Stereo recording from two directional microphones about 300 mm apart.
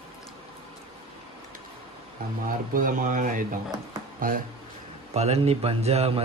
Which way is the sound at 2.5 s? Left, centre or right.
Right.